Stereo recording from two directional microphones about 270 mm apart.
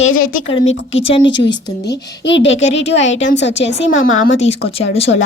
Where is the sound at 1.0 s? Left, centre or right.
Centre.